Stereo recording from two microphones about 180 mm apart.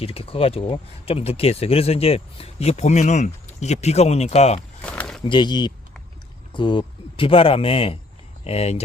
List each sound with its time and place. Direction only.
0.0 s speech: 30° left (ahead or behind)
4.8 s a sound: 5° left (ahead or behind)
5.2 s a man's voice: 25° left (ahead or behind)